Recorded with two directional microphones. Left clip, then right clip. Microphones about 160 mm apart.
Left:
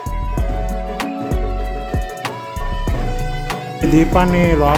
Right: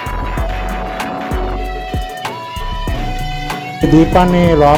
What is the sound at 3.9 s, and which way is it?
Speech, 20° right (ahead or behind).